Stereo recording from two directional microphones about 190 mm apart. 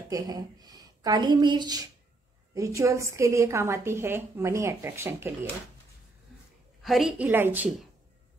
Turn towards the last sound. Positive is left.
turn(degrees=-10)  # may be behind; listen again after turning